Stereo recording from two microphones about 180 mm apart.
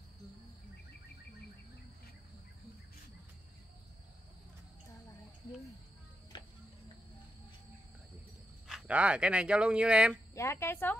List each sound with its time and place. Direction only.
6.3 s cricket: 25° left (ahead or behind)
8.6 s speech: 5° right (ahead or behind)
10.3 s a woman's voice: 15° left (ahead or behind)